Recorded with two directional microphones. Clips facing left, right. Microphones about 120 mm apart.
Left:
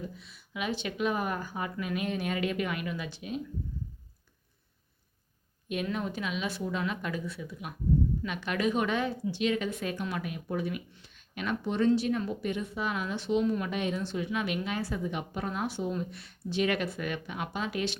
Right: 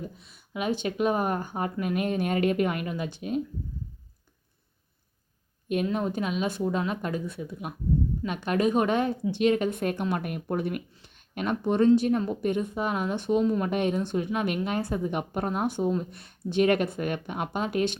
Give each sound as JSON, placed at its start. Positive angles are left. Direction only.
{"t": 0.3, "sound": "a woman's voice", "side_deg": -45}
{"t": 5.6, "sound": "a woman's voice", "side_deg": -40}